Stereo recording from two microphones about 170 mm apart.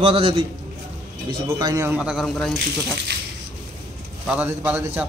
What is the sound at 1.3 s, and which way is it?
Speech, 20° right (ahead or behind).